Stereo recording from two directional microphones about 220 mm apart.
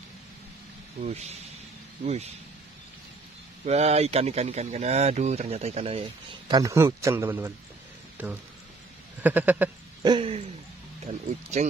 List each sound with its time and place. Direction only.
1.0 s speech: 30° right (ahead or behind)
3.6 s speech: 30° right (ahead or behind)
6.5 s a man's voice: 15° right (ahead or behind)
10.0 s speech: 25° right (ahead or behind)